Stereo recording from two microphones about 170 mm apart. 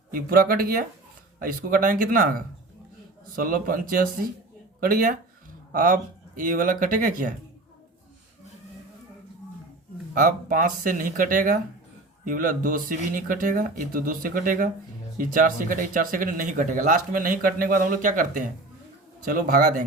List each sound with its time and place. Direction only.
0.1 s speech: 55° right (ahead or behind)
10.2 s speech: 55° right (ahead or behind)